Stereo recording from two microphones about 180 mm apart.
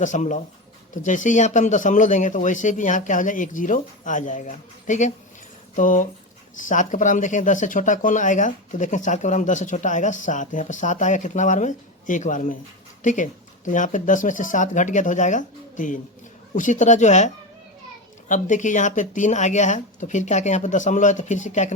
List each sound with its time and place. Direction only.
0.0 s speech: 45° left (ahead or behind)